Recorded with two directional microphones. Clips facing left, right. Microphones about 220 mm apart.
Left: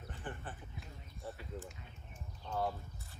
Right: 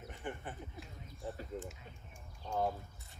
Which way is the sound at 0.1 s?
15° right (ahead or behind).